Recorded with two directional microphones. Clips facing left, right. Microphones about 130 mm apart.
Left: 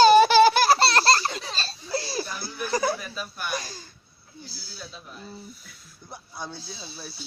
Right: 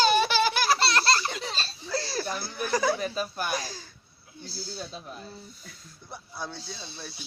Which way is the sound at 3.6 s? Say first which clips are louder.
Right 1 dB; centre (ahead or behind).